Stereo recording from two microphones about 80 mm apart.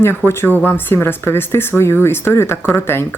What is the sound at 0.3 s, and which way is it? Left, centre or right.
Speech, left.